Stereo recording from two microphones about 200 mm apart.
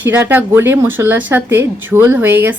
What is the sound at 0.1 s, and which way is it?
Speech, 10° right (ahead or behind).